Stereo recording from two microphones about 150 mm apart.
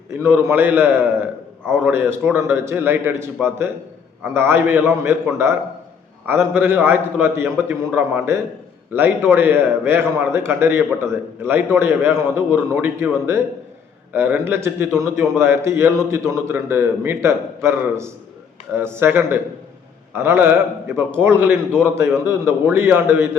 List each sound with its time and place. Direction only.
0.1 s a man's voice: 15° right (ahead or behind)